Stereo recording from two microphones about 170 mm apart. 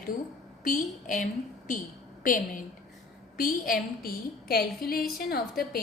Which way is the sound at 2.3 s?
55° left (ahead or behind).